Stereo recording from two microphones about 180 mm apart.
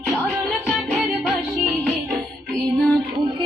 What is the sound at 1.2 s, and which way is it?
Music, centre (ahead or behind).